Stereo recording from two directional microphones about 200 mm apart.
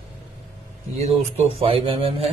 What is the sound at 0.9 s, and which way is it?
Speech, 30° right (ahead or behind).